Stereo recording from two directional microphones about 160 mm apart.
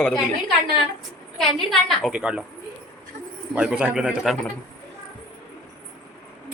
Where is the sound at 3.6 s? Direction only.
5° right (ahead or behind).